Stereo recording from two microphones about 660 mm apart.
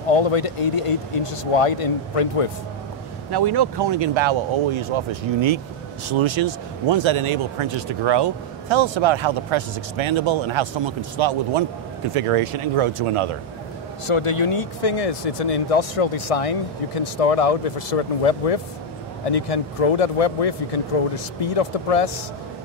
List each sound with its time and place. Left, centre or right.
0.1 s speech: left
3.3 s speech: right
6.0 s speech: right
14.0 s speech: left